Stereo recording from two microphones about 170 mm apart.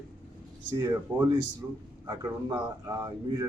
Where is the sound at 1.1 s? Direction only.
20° right (ahead or behind).